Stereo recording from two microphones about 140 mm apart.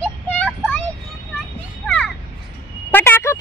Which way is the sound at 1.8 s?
10° left (ahead or behind).